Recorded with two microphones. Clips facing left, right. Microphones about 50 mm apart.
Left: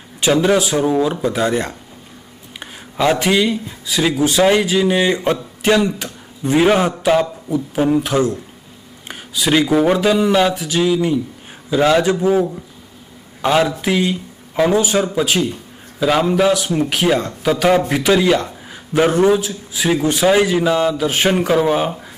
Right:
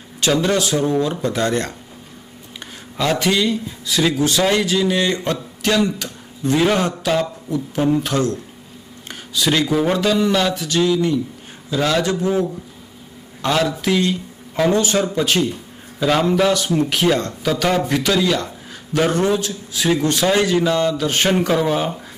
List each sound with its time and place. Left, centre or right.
0.2 s a man's voice: centre